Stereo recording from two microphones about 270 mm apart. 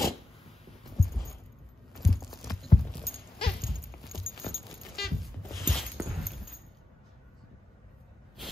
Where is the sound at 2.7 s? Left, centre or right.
Left.